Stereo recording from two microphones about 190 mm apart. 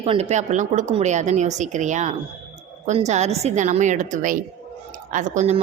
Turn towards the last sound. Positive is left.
turn(degrees=-40)  # may be behind; listen again after turning